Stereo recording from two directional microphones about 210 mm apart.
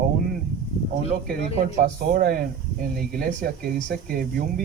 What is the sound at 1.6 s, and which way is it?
Speech, 40° right (ahead or behind).